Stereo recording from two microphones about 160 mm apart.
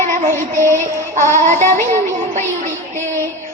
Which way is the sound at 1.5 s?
50° right (ahead or behind).